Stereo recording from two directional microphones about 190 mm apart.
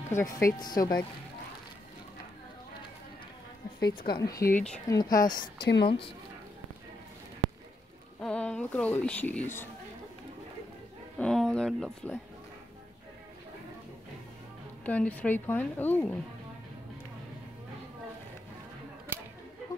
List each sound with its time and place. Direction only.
0.4 s a woman's voice: 20° left (ahead or behind)
4.0 s a woman's voice: 20° left (ahead or behind)
4.9 s a woman's voice: 20° left (ahead or behind)
8.2 s speech: 5° left (ahead or behind)
11.1 s speech: 5° left (ahead or behind)
14.9 s a woman's voice: 10° left (ahead or behind)
19.1 s a sound: 10° right (ahead or behind)